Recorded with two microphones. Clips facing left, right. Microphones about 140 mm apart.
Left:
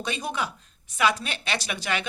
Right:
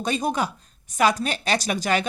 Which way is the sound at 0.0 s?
40° right (ahead or behind).